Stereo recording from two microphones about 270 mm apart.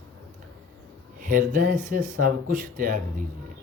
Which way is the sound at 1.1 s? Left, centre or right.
Right.